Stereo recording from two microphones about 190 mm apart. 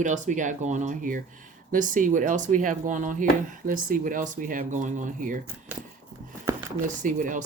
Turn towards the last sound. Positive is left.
turn(degrees=-45)  # may be behind; listen again after turning